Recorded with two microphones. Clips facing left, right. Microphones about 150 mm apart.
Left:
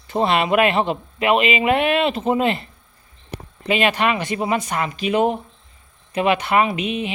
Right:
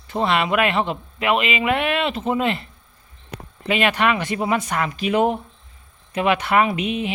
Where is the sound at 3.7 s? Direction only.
30° left (ahead or behind).